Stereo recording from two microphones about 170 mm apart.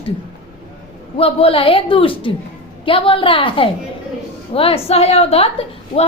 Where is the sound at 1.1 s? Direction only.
35° left (ahead or behind).